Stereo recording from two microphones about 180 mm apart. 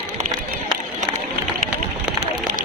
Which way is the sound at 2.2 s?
45° right (ahead or behind).